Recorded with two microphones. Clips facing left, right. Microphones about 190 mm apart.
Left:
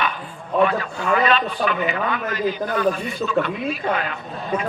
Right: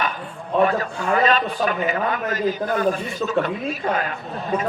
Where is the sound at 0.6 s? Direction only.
40° right (ahead or behind).